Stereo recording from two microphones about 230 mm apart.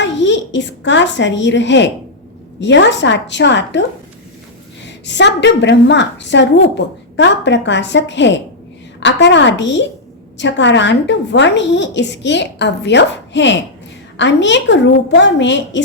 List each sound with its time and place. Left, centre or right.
0.0 s a child's voice: left
4.9 s a woman's voice: left